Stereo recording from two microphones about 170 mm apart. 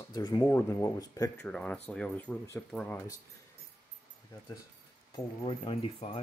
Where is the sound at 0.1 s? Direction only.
25° left (ahead or behind).